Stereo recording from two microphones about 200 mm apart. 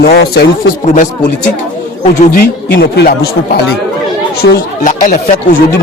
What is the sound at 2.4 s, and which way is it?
Speech, 55° left (ahead or behind).